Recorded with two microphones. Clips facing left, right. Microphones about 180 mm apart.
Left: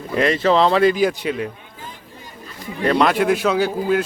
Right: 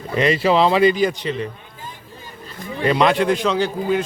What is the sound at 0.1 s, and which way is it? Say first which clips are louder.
Speech: even; centre (ahead or behind).